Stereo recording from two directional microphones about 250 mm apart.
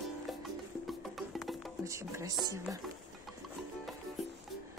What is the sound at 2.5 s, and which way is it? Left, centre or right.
Speech, centre.